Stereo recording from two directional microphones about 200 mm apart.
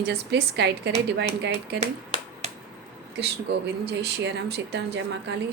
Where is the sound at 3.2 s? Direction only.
55° right (ahead or behind).